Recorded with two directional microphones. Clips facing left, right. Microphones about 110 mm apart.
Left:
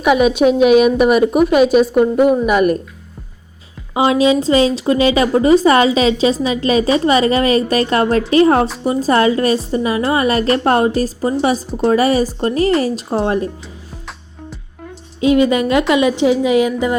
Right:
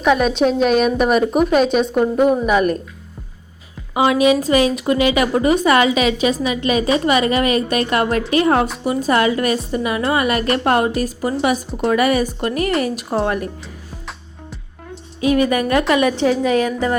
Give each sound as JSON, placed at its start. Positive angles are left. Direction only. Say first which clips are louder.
{"t": 0.0, "sound": "a woman's voice", "louder": "left 3 dB", "side_deg": 5}
{"t": 3.9, "sound": "a woman's voice", "louder": "left 1 dB", "side_deg": 25}
{"t": 15.2, "sound": "a woman's voice", "louder": "left 3 dB", "side_deg": 25}